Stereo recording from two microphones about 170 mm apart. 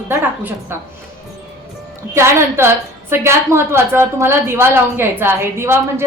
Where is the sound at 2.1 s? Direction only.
15° right (ahead or behind).